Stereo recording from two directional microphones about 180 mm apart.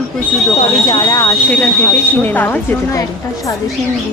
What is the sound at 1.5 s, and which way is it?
Speech, 10° left (ahead or behind).